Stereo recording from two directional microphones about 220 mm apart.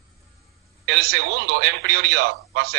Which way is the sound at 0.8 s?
50° right (ahead or behind).